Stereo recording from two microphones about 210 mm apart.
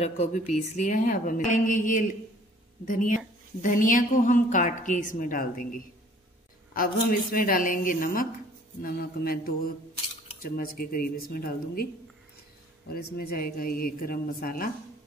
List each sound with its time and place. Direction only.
0.0 s a woman's voice: 30° left (ahead or behind)
10.4 s speech: 45° left (ahead or behind)
12.9 s speech: 45° left (ahead or behind)